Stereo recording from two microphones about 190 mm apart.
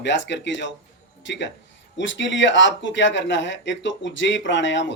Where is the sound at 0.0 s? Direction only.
70° left (ahead or behind).